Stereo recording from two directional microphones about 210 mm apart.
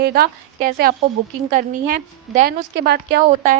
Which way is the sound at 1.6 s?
40° right (ahead or behind).